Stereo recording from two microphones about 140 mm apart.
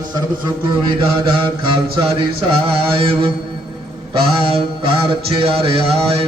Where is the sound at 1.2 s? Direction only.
35° right (ahead or behind).